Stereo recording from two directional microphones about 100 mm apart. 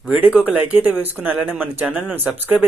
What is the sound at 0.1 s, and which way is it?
Speech, 15° right (ahead or behind).